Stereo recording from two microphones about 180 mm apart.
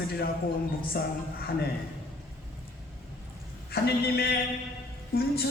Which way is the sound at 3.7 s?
60° left (ahead or behind).